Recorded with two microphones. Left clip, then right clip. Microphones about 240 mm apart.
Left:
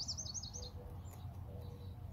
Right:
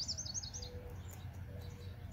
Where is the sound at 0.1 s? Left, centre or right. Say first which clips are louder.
Right 2 dB; left.